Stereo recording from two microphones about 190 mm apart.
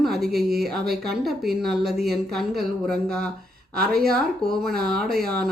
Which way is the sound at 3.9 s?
55° right (ahead or behind).